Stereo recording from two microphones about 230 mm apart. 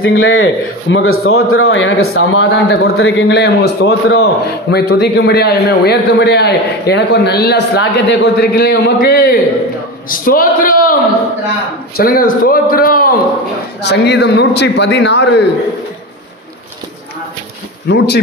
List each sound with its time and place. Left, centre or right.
0.0 s a man's voice: left
12.0 s a man's voice: left
17.8 s a man's voice: left